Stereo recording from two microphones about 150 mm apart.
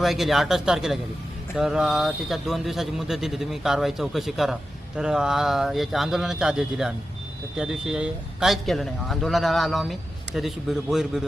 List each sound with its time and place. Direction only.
0.0 s speech: centre (ahead or behind)